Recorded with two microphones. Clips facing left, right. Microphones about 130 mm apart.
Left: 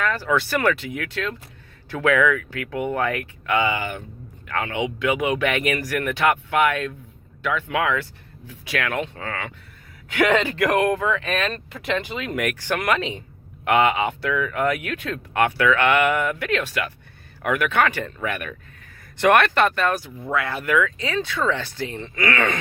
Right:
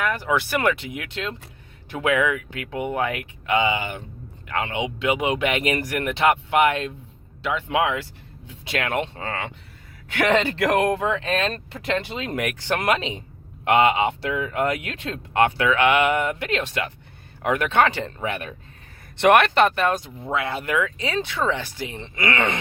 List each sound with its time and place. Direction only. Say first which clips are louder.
0.0 s speech: left 1 dB; 15° right (ahead or behind)